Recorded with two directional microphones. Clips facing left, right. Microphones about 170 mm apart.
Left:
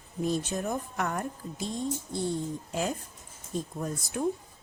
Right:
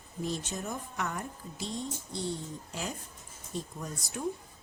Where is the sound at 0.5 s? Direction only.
55° left (ahead or behind).